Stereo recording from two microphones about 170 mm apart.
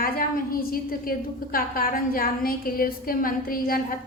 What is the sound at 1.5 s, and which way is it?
A woman's voice, 60° left (ahead or behind).